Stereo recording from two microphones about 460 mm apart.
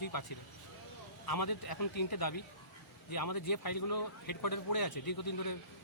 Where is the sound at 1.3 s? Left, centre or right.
Left.